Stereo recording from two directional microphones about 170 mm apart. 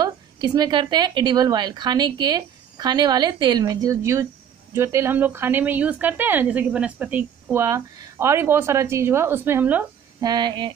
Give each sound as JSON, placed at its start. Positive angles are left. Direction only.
{"t": 0.0, "sound": "a woman's voice", "side_deg": -25}
{"t": 10.2, "sound": "a woman's voice", "side_deg": -25}